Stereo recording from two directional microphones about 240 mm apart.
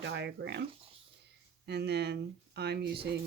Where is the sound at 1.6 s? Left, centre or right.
Right.